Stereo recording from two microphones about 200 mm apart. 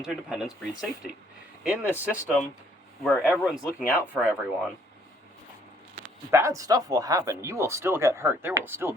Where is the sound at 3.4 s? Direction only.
5° right (ahead or behind).